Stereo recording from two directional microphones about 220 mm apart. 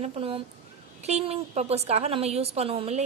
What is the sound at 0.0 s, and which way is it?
A woman's voice, 25° right (ahead or behind).